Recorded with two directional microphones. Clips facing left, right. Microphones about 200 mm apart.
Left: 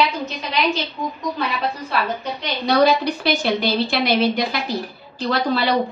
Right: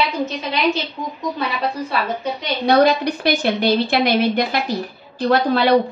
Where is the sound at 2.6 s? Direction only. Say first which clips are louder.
Right 2 dB; 50° right (ahead or behind).